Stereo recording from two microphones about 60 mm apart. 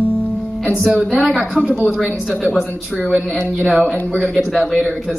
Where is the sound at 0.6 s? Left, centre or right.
Centre.